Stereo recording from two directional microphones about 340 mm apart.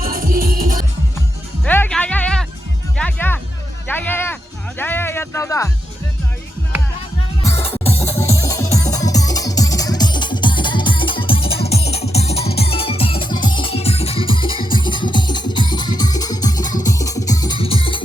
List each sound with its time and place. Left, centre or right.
0.0 s music: right
1.6 s music: centre
7.4 s music: centre